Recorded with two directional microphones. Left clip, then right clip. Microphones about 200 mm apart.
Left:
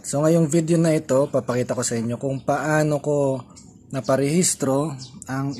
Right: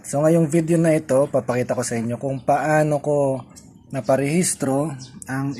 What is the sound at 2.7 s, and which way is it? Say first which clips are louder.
Speech: even; 15° left (ahead or behind).